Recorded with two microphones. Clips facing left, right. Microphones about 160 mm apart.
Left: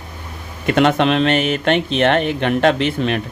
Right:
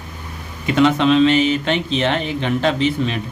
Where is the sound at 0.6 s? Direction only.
60° left (ahead or behind).